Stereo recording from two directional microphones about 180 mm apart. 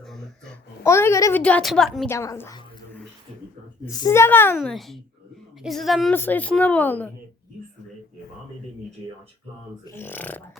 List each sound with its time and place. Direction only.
0.0 s babbling: centre (ahead or behind)
0.9 s a woman's voice: 15° left (ahead or behind)
2.0 s a woman's voice: 15° left (ahead or behind)
3.8 s a woman's voice: 20° left (ahead or behind)
4.5 s a woman's voice: centre (ahead or behind)
6.1 s a woman's voice: 10° left (ahead or behind)
9.8 s a woman's voice: 10° left (ahead or behind)